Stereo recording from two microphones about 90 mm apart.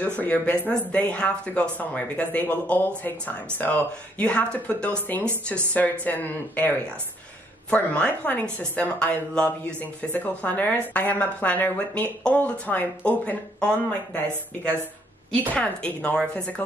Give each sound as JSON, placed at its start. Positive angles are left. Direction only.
{"t": 0.2, "sound": "a woman's voice", "side_deg": 15}
{"t": 15.5, "sound": "a woman's voice", "side_deg": 15}